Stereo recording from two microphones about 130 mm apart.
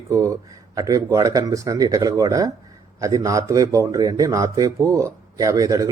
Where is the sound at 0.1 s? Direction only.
25° right (ahead or behind).